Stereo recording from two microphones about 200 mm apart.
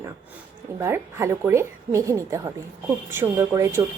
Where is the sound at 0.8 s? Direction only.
10° right (ahead or behind).